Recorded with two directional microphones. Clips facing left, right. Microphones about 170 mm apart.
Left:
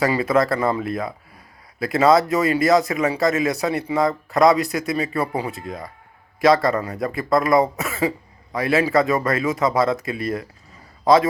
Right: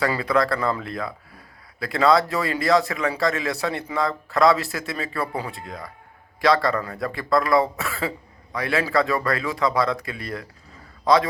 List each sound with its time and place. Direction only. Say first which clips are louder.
0.0 s a man's voice: left 3 dB; 20° left (ahead or behind)